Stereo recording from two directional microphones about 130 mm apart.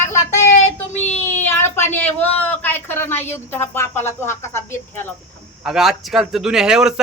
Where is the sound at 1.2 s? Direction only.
15° left (ahead or behind).